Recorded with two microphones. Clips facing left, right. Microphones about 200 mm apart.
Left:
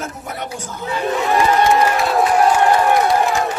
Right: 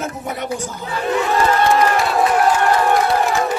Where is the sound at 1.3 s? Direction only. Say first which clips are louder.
Left 2 dB; 15° left (ahead or behind).